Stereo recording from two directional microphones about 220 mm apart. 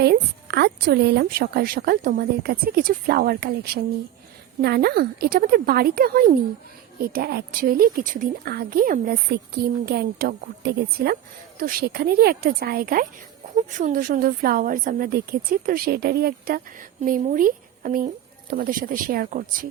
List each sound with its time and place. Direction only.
0.0 s a woman's voice: 50° right (ahead or behind)